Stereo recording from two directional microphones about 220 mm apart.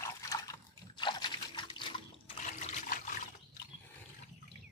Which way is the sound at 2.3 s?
30° left (ahead or behind).